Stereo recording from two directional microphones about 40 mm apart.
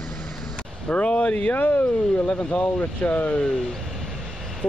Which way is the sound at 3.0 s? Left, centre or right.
Left.